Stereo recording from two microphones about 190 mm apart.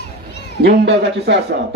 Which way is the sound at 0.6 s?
65° right (ahead or behind).